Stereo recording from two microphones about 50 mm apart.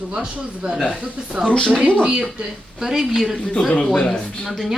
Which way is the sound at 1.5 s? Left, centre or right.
Centre.